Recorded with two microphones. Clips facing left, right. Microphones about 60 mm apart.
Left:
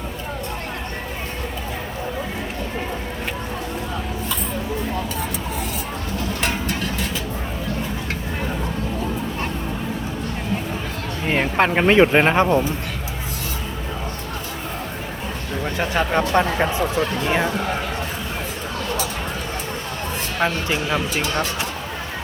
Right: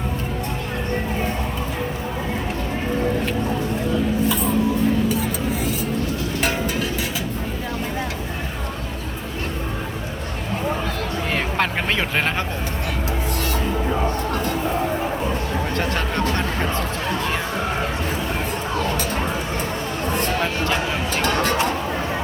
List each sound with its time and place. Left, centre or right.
11.3 s speech: left
15.8 s speech: centre
16.3 s a sound: left